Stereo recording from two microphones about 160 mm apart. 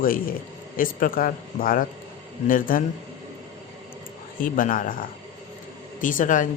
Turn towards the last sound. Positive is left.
turn(degrees=55)  # may be behind; listen again after turning